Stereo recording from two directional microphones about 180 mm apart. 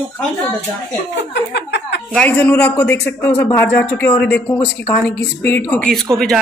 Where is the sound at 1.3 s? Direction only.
70° left (ahead or behind).